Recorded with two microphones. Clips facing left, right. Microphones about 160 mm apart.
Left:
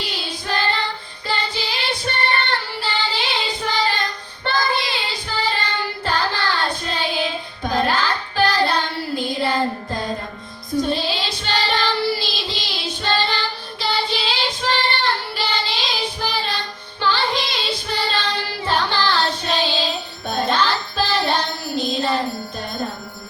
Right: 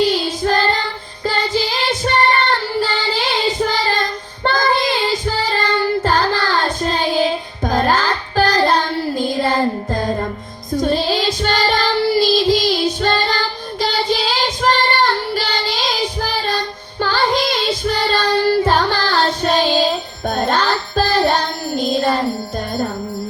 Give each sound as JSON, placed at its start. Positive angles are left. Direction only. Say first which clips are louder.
{"t": 0.3, "sound": "child singing", "louder": "right 7 dB", "side_deg": -45}
{"t": 10.9, "sound": "child singing", "louder": "right 7 dB", "side_deg": -45}